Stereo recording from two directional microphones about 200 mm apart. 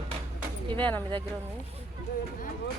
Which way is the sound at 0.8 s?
10° left (ahead or behind).